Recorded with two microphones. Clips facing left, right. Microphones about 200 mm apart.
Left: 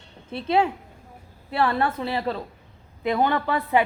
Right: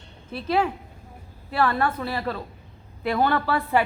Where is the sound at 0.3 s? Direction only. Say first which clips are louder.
Left 2 dB; 25° left (ahead or behind).